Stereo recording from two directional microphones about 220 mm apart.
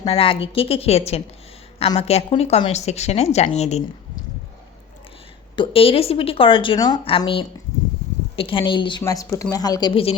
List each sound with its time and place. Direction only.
0.0 s a woman's voice: 25° left (ahead or behind)
5.5 s a woman's voice: 25° left (ahead or behind)